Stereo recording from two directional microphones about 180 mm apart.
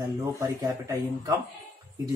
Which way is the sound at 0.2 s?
20° right (ahead or behind).